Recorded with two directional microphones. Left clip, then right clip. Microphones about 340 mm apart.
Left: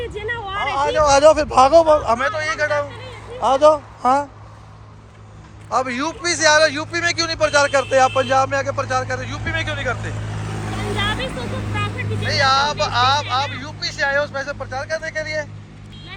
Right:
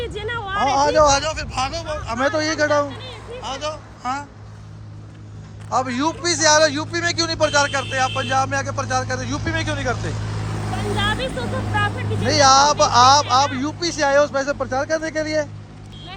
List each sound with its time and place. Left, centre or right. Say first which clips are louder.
0.2 s a sound: left 2 dB; centre
0.6 s a sound: right 3 dB; centre
0.9 s a man's voice: left 4 dB; centre
2.1 s a man's voice: right 1 dB; centre
3.4 s a man's voice: left 15 dB; centre
5.6 s a man's voice: even; centre
12.3 s speech: right 3 dB; centre